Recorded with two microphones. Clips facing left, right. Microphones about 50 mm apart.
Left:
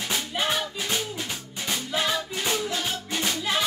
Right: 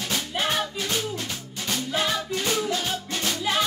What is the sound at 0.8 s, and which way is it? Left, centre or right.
Music, centre.